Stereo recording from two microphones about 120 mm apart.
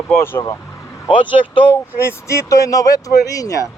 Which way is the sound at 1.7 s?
20° left (ahead or behind).